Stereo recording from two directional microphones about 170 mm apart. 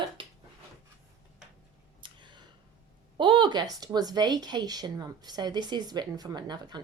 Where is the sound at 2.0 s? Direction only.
30° right (ahead or behind).